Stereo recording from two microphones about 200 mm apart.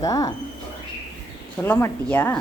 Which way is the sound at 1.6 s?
10° left (ahead or behind).